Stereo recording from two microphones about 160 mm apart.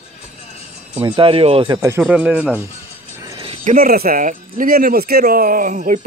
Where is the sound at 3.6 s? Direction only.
65° right (ahead or behind).